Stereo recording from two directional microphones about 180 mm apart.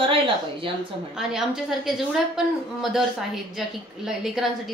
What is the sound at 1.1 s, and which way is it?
A woman's voice, centre (ahead or behind).